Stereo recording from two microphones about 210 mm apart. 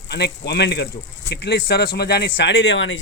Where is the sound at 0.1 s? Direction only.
50° left (ahead or behind).